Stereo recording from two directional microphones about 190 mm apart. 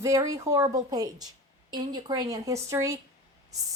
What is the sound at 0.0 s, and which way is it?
Speech, 15° right (ahead or behind).